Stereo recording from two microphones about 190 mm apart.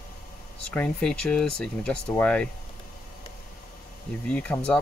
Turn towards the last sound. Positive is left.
turn(degrees=5)  # may be behind; listen again after turning